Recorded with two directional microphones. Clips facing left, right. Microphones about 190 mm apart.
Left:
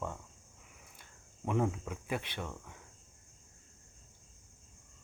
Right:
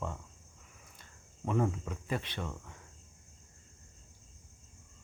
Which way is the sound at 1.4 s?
5° left (ahead or behind).